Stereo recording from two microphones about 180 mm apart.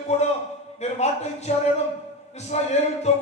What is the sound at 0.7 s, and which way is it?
A man's voice, 40° left (ahead or behind).